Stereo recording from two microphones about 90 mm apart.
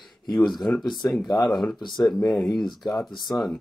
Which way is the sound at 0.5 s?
Centre (ahead or behind).